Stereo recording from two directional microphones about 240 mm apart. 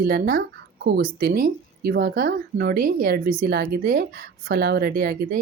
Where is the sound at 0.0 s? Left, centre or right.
Right.